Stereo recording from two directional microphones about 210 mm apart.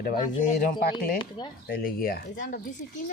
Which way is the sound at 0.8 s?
45° left (ahead or behind).